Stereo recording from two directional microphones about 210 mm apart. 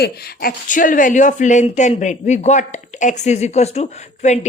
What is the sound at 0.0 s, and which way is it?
Speech, 50° left (ahead or behind).